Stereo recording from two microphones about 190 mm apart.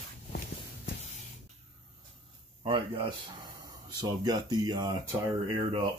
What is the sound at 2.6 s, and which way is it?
Speech, 25° right (ahead or behind).